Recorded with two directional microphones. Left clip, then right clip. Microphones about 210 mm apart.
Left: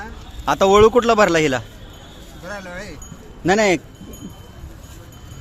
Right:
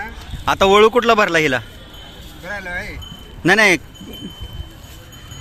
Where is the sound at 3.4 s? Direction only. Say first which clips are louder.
Right 4 dB; 10° right (ahead or behind).